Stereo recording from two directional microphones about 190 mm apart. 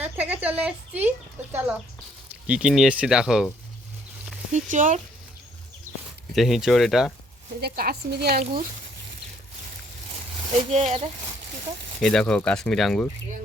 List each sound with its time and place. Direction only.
0.0 s a woman's voice: 10° right (ahead or behind)
2.5 s speech: 5° right (ahead or behind)
4.5 s speech: 40° right (ahead or behind)
6.3 s speech: centre (ahead or behind)
7.6 s speech: 55° right (ahead or behind)
10.7 s speech: 35° right (ahead or behind)
11.9 s speech: 5° left (ahead or behind)